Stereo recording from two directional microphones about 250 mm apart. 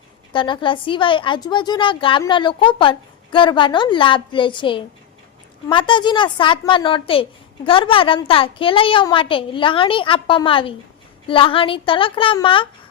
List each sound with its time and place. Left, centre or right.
0.3 s a woman's voice: centre